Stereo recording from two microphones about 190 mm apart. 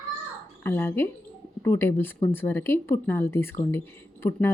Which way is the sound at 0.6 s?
10° left (ahead or behind).